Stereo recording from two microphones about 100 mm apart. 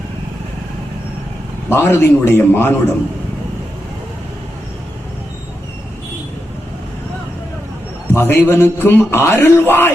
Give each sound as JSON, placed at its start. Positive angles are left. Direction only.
{"t": 1.7, "sound": "a man's voice", "side_deg": 20}
{"t": 8.1, "sound": "a man's voice", "side_deg": 25}